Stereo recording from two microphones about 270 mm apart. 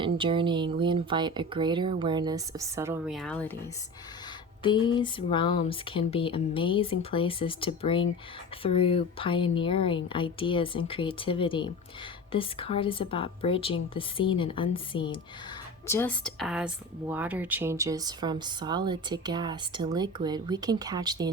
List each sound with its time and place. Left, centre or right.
0.0 s speech: centre
4.6 s speech: centre
15.9 s speech: centre